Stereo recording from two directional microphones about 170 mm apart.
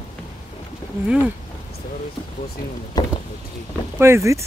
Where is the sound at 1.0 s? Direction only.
5° right (ahead or behind).